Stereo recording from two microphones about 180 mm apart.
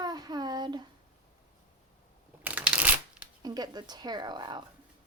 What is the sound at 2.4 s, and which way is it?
Shuffling cards, 5° right (ahead or behind).